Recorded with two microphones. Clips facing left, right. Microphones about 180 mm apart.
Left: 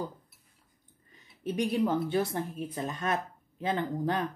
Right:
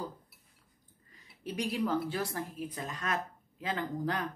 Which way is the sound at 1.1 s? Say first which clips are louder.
Left 5 dB; 25° left (ahead or behind).